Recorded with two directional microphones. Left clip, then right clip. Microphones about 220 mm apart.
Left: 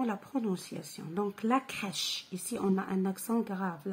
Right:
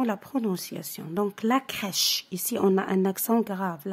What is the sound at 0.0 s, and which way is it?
Speech, 50° right (ahead or behind).